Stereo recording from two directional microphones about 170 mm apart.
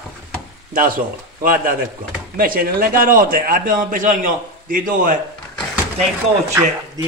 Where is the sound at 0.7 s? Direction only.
55° right (ahead or behind).